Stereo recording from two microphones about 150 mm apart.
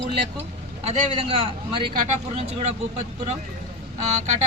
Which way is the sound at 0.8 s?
40° right (ahead or behind).